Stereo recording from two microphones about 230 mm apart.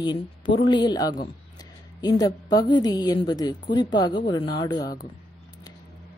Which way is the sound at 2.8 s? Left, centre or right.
Centre.